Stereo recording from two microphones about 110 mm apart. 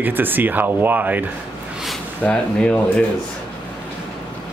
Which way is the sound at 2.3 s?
10° left (ahead or behind).